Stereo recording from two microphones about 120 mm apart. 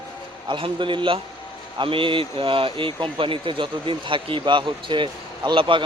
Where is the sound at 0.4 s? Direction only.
40° right (ahead or behind).